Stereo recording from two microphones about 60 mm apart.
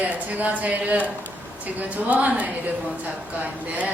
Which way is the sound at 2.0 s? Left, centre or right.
Right.